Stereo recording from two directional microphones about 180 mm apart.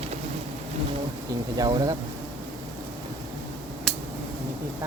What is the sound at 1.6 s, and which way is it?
Speech, 20° right (ahead or behind).